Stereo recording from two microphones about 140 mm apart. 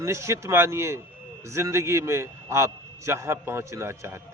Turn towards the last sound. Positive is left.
turn(degrees=-20)  # may be behind; listen again after turning